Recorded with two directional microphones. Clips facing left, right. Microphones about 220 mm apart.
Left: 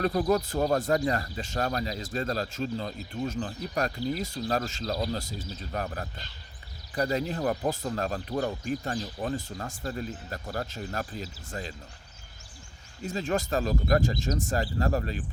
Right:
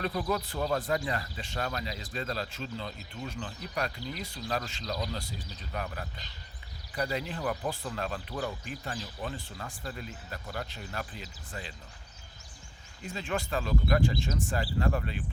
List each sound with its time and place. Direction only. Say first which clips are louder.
0.0 s speech: left 6 dB; 45° left (ahead or behind)
13.0 s speech: left 5 dB; 40° left (ahead or behind)